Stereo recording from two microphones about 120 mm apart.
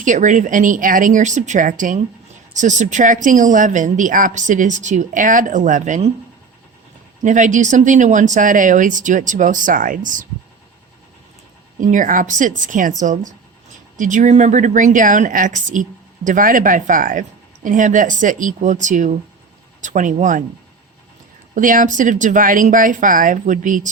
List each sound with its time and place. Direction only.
0.0 s a woman's voice: 90° right
7.2 s a woman's voice: 90° right
11.8 s a woman's voice: 90° right
21.5 s a woman's voice: 90° right